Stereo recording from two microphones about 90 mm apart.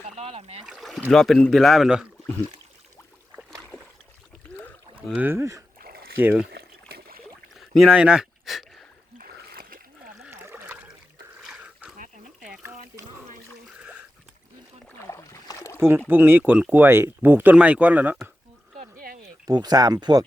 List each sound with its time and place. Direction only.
0.2 s speech: 90° right
0.6 s a man's voice: 5° right (ahead or behind)
3.5 s a sound: 5° left (ahead or behind)
5.1 s speech: 25° right (ahead or behind)
6.1 s speech: 20° right (ahead or behind)
7.8 s speech: 10° right (ahead or behind)
10.2 s trickle: 25° right (ahead or behind)
10.7 s water: 15° right (ahead or behind)
11.4 s a sound: 5° right (ahead or behind)
13.7 s a sound: 15° right (ahead or behind)
15.0 s boat: 35° left (ahead or behind)
16.0 s speech: 20° right (ahead or behind)
19.5 s speech: 50° right (ahead or behind)